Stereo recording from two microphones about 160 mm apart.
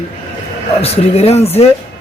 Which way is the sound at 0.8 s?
40° left (ahead or behind).